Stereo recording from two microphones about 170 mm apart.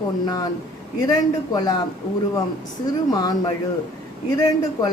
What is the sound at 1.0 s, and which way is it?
Speech, 20° left (ahead or behind).